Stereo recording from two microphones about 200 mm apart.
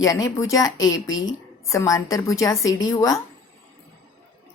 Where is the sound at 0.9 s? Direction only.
75° left (ahead or behind).